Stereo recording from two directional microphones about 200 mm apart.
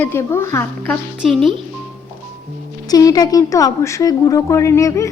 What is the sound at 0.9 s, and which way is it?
Speech, centre (ahead or behind).